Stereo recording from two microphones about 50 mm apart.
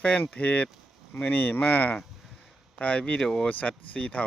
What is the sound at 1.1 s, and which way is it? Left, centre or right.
Speech, left.